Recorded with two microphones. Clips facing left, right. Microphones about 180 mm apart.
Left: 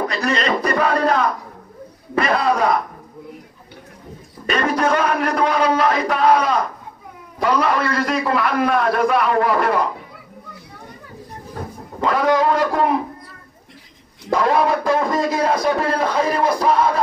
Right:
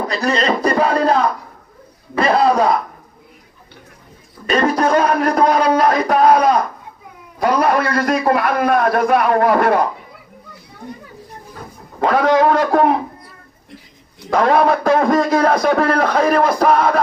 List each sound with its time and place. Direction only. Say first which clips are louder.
0.1 s a man's voice: right 3 dB; 35° right (ahead or behind)
4.5 s a man's voice: right 3 dB; 35° right (ahead or behind)
7.6 s a man's voice: right 3 dB; 45° right (ahead or behind)
12.0 s a man's voice: right 3 dB; 60° right (ahead or behind)
14.3 s a man's voice: right 3 dB; 65° right (ahead or behind)